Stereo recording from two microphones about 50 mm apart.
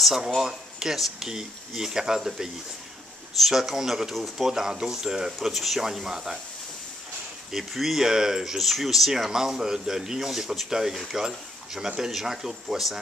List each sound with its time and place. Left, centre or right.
0.0 s speech: centre
7.7 s speech: centre